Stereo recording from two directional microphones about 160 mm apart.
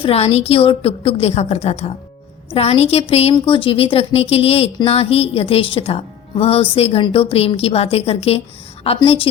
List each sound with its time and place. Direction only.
0.0 s a woman's voice: 40° left (ahead or behind)